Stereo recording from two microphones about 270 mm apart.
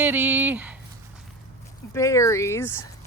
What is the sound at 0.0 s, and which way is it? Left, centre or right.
Speech, centre.